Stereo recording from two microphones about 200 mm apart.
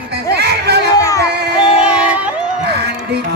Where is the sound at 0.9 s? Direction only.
15° left (ahead or behind).